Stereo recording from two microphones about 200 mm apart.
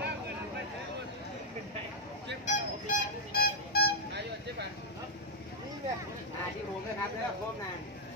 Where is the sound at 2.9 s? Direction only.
50° left (ahead or behind).